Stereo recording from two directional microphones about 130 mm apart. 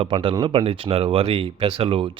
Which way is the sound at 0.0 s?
40° right (ahead or behind).